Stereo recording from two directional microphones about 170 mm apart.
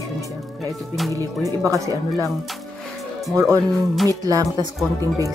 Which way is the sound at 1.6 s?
20° right (ahead or behind).